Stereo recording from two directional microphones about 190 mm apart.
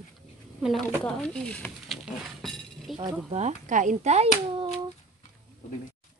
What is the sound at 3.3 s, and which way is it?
Speech, 35° right (ahead or behind).